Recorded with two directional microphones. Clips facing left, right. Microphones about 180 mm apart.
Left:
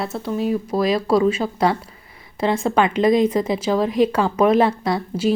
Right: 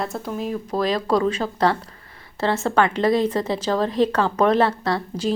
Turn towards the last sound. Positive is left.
turn(degrees=10)  # may be behind; listen again after turning